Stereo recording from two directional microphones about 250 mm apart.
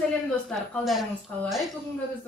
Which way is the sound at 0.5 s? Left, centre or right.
Centre.